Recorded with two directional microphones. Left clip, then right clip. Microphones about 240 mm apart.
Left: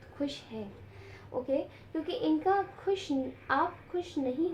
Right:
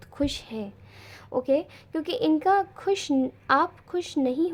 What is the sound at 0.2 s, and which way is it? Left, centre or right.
A woman's voice, right.